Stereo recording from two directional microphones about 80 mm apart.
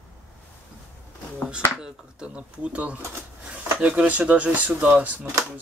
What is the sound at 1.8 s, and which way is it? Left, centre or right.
Speech, centre.